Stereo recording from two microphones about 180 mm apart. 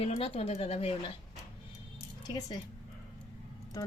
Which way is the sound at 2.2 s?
25° left (ahead or behind).